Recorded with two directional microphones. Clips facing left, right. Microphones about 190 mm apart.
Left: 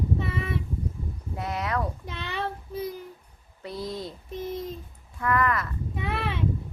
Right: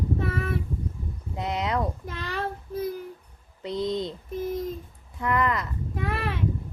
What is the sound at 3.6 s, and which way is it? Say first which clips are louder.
Speech: right 6 dB; 20° right (ahead or behind).